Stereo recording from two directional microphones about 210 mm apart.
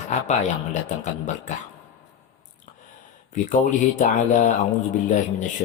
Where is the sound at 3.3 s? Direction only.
35° left (ahead or behind).